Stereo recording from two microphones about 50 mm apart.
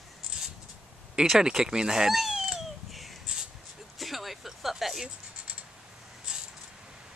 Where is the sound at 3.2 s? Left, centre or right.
Centre.